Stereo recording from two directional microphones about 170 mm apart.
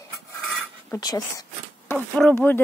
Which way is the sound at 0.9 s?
20° left (ahead or behind).